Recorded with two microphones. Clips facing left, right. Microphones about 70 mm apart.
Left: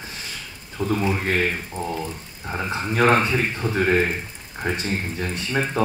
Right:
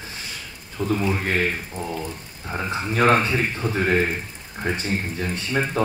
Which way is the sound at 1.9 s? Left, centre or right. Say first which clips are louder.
Left 1 dB; centre.